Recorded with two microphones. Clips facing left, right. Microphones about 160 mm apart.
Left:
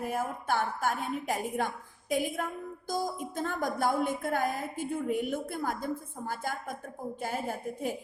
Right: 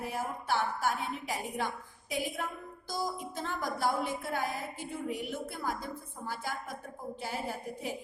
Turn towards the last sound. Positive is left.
turn(degrees=50)  # may be behind; listen again after turning